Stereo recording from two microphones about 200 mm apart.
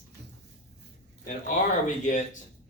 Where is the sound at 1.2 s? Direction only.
40° left (ahead or behind).